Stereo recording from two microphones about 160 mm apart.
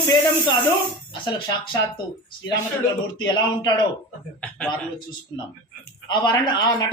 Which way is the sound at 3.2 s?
25° left (ahead or behind).